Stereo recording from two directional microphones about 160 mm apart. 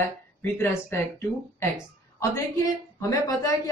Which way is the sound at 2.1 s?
20° left (ahead or behind).